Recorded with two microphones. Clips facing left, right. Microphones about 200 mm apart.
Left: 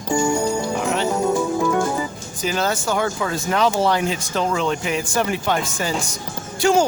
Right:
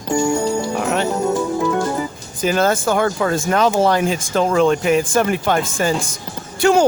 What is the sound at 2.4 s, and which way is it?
Speech, 50° right (ahead or behind).